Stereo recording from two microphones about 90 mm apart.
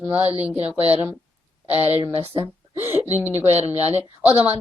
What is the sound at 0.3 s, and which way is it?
Speech, 15° right (ahead or behind).